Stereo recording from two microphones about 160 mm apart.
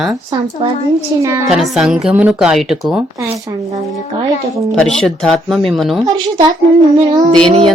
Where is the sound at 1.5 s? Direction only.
5° right (ahead or behind).